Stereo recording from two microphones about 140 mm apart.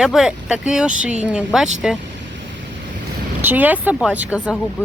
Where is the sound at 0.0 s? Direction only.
5° right (ahead or behind).